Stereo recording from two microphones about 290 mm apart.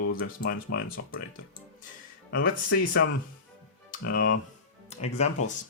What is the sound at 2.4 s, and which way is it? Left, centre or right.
Speech, left.